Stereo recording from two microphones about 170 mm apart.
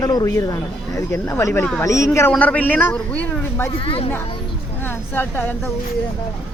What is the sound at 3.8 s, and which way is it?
Speech, 30° left (ahead or behind).